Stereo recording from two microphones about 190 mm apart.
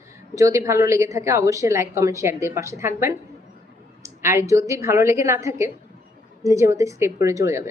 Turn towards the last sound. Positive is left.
turn(degrees=-15)  # may be behind; listen again after turning